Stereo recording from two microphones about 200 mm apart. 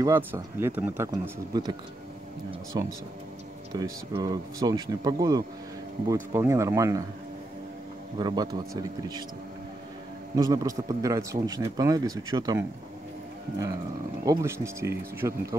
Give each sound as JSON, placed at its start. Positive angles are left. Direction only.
{"t": 0.0, "sound": "speech", "side_deg": -10}
{"t": 8.2, "sound": "speech", "side_deg": -20}
{"t": 10.3, "sound": "speech", "side_deg": -15}
{"t": 14.2, "sound": "speech", "side_deg": -15}